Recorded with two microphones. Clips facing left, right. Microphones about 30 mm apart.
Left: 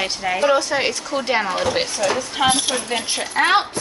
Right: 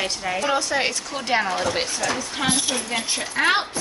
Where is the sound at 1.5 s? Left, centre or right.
Centre.